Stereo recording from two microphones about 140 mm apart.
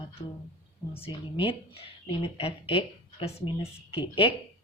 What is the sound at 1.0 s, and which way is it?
A woman's voice, 40° left (ahead or behind).